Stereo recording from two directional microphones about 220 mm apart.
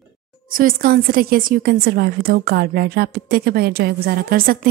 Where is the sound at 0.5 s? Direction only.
40° right (ahead or behind).